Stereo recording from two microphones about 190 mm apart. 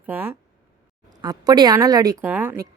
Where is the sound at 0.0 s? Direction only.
10° right (ahead or behind).